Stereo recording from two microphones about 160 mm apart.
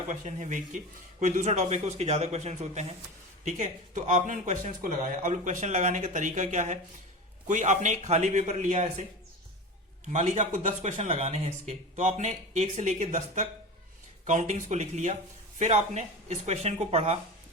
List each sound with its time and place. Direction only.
0.1 s speech: 50° right (ahead or behind)
10.1 s speech: 45° right (ahead or behind)